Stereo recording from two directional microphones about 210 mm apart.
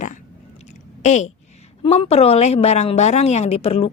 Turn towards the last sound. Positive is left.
turn(degrees=30)  # may be behind; listen again after turning